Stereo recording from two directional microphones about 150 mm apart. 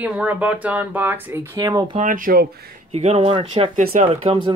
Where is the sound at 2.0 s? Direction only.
60° right (ahead or behind).